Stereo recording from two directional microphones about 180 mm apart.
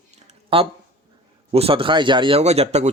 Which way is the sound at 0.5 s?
30° right (ahead or behind).